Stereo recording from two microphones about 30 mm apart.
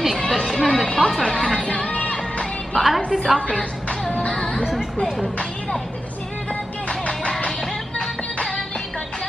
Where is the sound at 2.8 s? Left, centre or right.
Centre.